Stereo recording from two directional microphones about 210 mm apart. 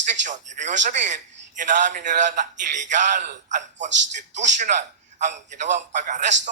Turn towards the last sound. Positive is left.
turn(degrees=-35)  # may be behind; listen again after turning